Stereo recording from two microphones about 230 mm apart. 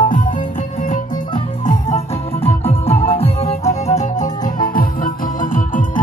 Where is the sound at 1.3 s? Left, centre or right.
Left.